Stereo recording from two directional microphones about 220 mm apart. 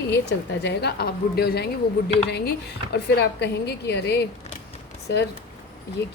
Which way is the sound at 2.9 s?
50° left (ahead or behind).